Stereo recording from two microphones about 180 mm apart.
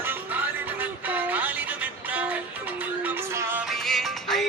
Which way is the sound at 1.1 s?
10° right (ahead or behind).